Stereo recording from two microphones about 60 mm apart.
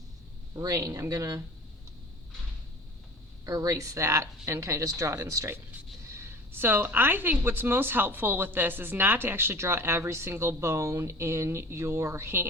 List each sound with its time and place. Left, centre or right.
0.5 s speech: right
3.4 s speech: right
6.1 s speech: right